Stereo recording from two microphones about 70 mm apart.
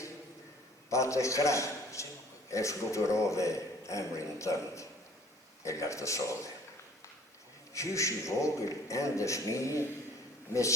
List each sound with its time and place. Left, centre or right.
0.9 s a man's voice: left
7.7 s a man's voice: left